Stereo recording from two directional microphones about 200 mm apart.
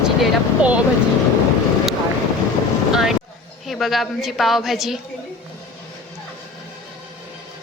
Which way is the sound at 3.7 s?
Centre (ahead or behind).